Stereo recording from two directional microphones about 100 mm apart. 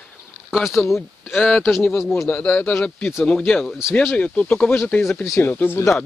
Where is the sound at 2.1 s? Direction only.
20° left (ahead or behind).